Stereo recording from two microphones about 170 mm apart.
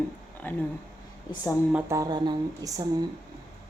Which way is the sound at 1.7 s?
20° right (ahead or behind).